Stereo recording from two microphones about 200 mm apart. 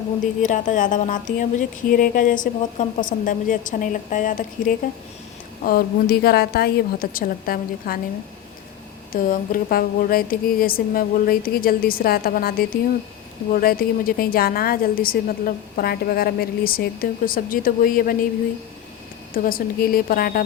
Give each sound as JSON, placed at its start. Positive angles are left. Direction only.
{"t": 0.4, "sound": "a woman's voice", "side_deg": 40}
{"t": 9.1, "sound": "a woman's voice", "side_deg": 45}
{"t": 19.3, "sound": "a woman's voice", "side_deg": 45}